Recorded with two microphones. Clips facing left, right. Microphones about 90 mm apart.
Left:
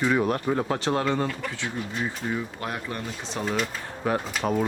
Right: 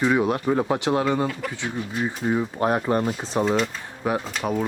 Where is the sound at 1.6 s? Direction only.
20° right (ahead or behind).